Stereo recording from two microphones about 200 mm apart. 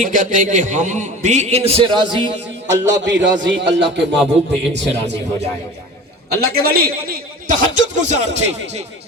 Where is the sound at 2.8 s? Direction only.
65° right (ahead or behind).